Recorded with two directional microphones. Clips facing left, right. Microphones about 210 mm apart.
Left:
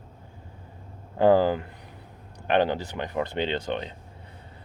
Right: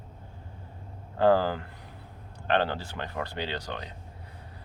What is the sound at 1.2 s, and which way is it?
Speech, 15° left (ahead or behind).